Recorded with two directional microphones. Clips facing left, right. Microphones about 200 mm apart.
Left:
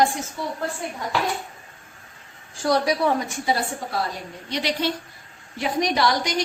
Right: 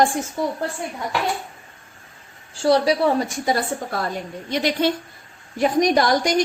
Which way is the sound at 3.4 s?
45° right (ahead or behind).